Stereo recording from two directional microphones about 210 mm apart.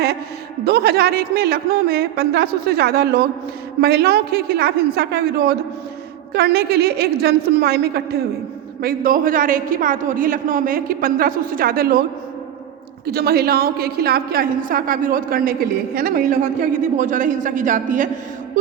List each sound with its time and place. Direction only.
0.6 s a woman's voice: 50° right (ahead or behind)
13.1 s a woman's voice: 45° right (ahead or behind)